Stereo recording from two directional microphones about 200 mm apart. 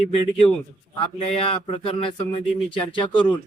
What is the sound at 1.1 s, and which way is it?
Speech, 30° left (ahead or behind).